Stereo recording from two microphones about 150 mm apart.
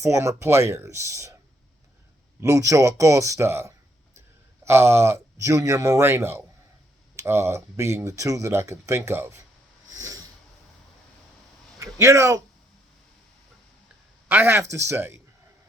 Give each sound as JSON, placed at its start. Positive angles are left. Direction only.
{"t": 0.0, "sound": "speech", "side_deg": -20}
{"t": 2.4, "sound": "speech", "side_deg": -20}
{"t": 11.9, "sound": "speech", "side_deg": -20}
{"t": 14.3, "sound": "speech", "side_deg": -15}